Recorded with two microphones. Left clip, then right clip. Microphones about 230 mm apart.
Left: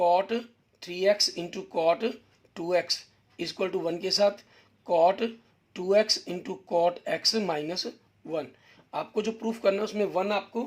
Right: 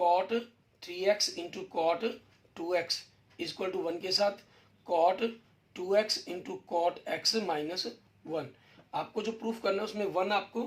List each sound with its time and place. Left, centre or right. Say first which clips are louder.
0.0 s speech: left 3 dB; left
8.9 s speech: left 4 dB; left